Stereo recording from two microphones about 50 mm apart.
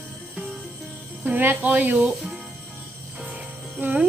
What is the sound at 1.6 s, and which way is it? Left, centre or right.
Speech, right.